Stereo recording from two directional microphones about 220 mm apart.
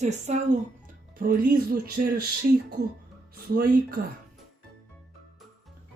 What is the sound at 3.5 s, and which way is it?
Speech, 40° right (ahead or behind).